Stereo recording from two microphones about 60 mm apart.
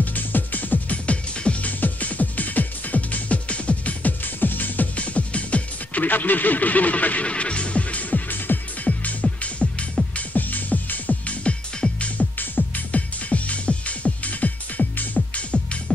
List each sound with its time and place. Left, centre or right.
0.0 s music: left
12.4 s music: left